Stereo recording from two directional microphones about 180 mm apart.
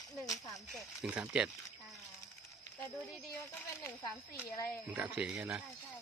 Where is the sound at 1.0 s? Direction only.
5° right (ahead or behind).